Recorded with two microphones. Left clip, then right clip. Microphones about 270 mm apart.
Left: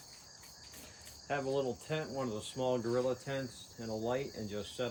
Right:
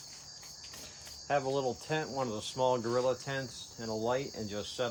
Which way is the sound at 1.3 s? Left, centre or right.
Right.